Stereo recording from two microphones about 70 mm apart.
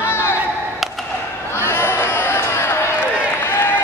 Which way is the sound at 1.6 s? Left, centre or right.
Left.